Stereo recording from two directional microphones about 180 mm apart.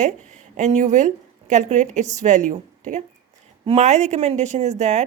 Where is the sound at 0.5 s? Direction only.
40° right (ahead or behind).